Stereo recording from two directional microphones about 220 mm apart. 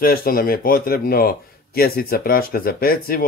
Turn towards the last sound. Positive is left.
turn(degrees=40)  # may be behind; listen again after turning